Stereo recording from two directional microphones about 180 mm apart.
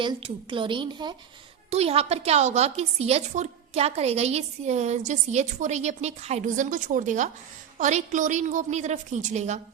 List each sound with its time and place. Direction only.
0.0 s a woman's voice: 25° right (ahead or behind)